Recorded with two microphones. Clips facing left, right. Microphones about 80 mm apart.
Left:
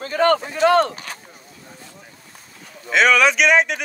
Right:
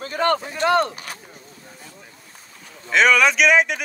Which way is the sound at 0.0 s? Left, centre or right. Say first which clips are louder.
Left 4 dB; left.